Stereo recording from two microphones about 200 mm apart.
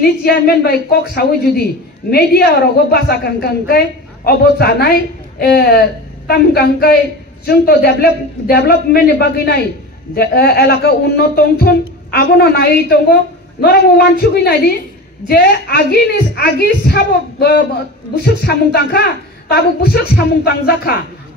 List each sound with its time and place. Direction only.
0.0 s a woman's voice: 50° left (ahead or behind)